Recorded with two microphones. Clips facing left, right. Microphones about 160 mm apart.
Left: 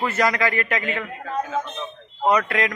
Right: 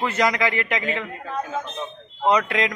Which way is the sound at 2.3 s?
15° right (ahead or behind).